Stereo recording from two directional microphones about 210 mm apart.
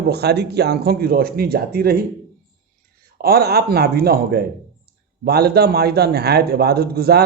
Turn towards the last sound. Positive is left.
turn(degrees=-50)  # may be behind; listen again after turning